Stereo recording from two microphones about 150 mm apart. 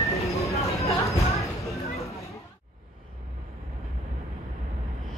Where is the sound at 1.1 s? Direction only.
20° left (ahead or behind).